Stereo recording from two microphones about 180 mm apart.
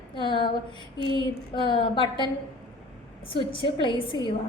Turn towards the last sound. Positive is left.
turn(degrees=30)  # may be behind; listen again after turning